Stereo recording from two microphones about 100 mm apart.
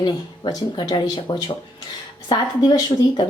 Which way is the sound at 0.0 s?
45° left (ahead or behind).